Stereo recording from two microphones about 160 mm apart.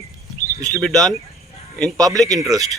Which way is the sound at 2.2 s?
25° right (ahead or behind).